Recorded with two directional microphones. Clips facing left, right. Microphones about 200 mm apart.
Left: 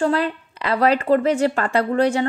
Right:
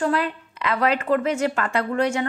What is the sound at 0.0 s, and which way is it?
A woman's voice, 30° left (ahead or behind).